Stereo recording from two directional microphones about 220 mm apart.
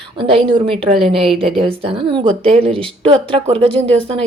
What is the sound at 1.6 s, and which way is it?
Speech, 25° right (ahead or behind).